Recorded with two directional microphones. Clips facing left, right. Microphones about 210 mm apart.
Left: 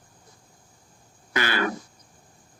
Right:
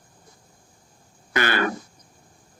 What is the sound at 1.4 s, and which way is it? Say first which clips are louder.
Speech: right 3 dB; 55° right (ahead or behind).